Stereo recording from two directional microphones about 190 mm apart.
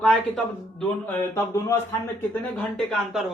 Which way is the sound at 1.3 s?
15° left (ahead or behind).